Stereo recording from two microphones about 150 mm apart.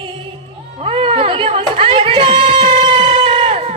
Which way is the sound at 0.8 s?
40° right (ahead or behind).